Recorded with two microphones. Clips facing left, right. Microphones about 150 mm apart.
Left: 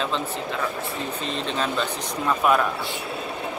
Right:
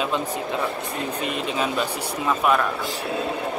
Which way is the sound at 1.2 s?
10° right (ahead or behind).